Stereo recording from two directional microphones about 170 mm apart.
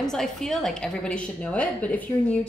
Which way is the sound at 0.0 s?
5° left (ahead or behind).